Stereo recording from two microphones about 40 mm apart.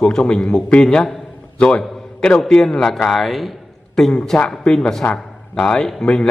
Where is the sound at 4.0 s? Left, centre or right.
Centre.